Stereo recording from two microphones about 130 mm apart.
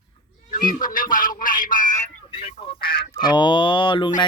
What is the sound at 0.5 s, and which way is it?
Music, 90° left.